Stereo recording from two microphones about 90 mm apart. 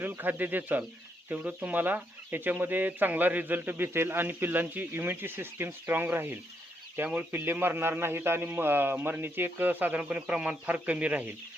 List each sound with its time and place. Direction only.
0.0 s speech: 20° right (ahead or behind)